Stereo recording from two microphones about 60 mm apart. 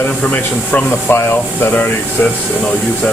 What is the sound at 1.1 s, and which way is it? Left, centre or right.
Speech, left.